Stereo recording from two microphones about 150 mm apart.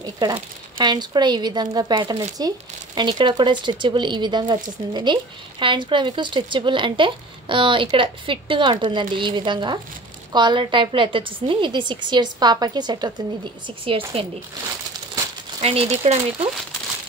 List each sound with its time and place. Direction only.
0.7 s speech: 30° right (ahead or behind)
15.6 s speech: 40° right (ahead or behind)